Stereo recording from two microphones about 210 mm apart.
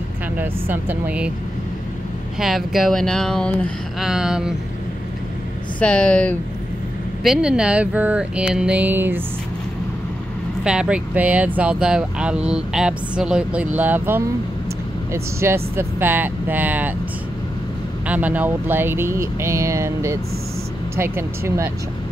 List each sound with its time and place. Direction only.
0.4 s speech: 10° right (ahead or behind)
2.3 s speech: centre (ahead or behind)
5.8 s speech: 5° left (ahead or behind)
10.6 s speech: 5° right (ahead or behind)
18.0 s speech: 5° right (ahead or behind)